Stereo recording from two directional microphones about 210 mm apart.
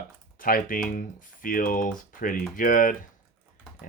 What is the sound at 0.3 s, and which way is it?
Speech, 40° left (ahead or behind).